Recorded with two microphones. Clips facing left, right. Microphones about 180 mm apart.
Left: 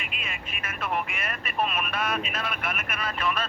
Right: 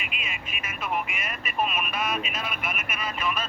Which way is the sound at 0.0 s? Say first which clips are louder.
Even; 30° left (ahead or behind).